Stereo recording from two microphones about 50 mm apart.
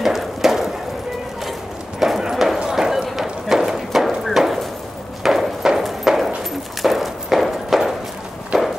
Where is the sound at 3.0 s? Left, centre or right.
Centre.